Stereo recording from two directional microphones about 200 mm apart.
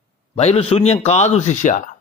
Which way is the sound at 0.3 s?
30° left (ahead or behind).